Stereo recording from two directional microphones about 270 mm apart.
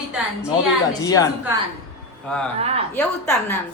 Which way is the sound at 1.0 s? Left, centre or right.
Centre.